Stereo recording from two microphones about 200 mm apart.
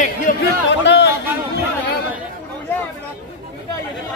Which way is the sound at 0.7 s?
60° left (ahead or behind).